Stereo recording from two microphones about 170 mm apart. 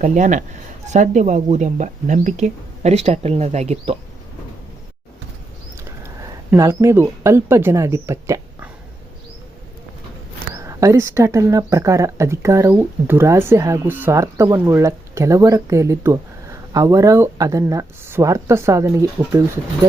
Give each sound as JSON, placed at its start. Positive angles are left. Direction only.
{"t": 0.0, "sound": "speech", "side_deg": -45}
{"t": 6.0, "sound": "speech", "side_deg": -15}
{"t": 10.5, "sound": "speech", "side_deg": -20}